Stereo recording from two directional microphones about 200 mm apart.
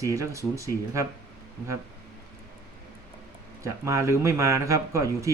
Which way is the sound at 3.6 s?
15° right (ahead or behind).